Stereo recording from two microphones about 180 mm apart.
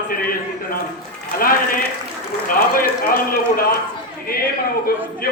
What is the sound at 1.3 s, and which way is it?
A man's voice, 55° left (ahead or behind).